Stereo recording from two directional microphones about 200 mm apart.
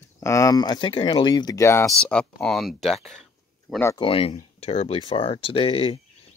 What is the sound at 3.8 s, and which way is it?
Speech, 15° left (ahead or behind).